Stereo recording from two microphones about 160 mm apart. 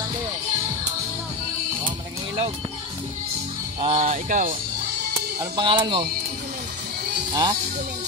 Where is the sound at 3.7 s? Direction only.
40° right (ahead or behind).